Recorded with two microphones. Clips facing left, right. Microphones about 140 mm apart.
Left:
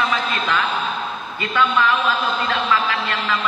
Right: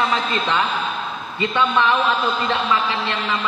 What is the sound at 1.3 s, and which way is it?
A man's voice, 25° right (ahead or behind).